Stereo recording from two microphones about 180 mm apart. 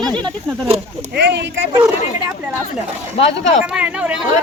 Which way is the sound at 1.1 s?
75° right (ahead or behind).